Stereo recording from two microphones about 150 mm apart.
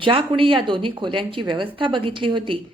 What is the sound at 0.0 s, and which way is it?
A woman's voice, 35° right (ahead or behind).